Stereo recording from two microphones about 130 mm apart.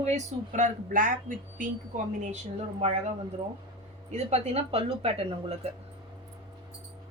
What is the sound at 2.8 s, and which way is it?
Speech, 55° right (ahead or behind).